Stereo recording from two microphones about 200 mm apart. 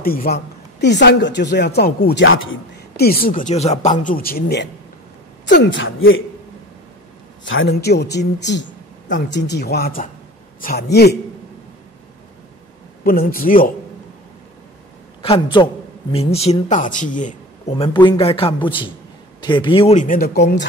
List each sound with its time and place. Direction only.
0.0 s speech: 45° left (ahead or behind)
2.2 s a man's voice: 80° left
3.0 s speech: 50° left (ahead or behind)
4.0 s speech: 45° left (ahead or behind)
5.4 s a woman's voice: 60° left (ahead or behind); by 6.2 s 85° left
7.4 s speech: 70° left (ahead or behind)
13.0 s speech: 45° left (ahead or behind)
15.5 s speech: 25° left (ahead or behind); by 20.6 s 55° left (ahead or behind)